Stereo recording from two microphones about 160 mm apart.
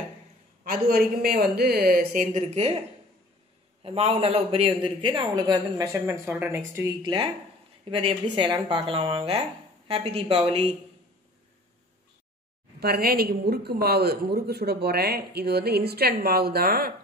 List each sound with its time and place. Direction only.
0.7 s a woman's voice: 70° right (ahead or behind); by 2.7 s 45° right (ahead or behind)
3.8 s a man's voice: 40° right (ahead or behind); by 6.9 s 15° right (ahead or behind)
7.9 s a woman's voice: 35° right (ahead or behind)
12.8 s a woman's voice: 70° right (ahead or behind)